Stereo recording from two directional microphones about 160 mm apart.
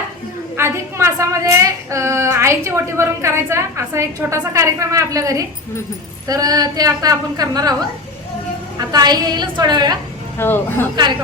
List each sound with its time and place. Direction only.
0.5 s a woman's voice: 15° right (ahead or behind)
8.8 s a woman's voice: 25° right (ahead or behind)
10.3 s speech: 15° left (ahead or behind)